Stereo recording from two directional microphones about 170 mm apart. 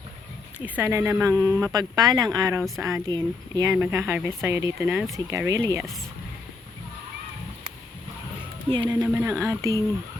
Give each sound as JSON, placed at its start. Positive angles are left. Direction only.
{"t": 0.6, "sound": "speech", "side_deg": -15}
{"t": 8.7, "sound": "speech", "side_deg": -25}
{"t": 9.1, "sound": "speech", "side_deg": -15}